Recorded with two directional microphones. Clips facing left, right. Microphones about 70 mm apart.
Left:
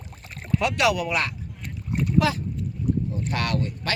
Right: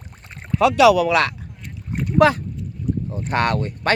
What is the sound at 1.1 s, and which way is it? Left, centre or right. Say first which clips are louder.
Speech: right 8 dB; right.